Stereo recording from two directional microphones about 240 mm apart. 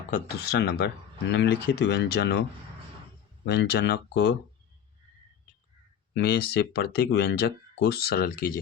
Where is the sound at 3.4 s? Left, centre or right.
Left.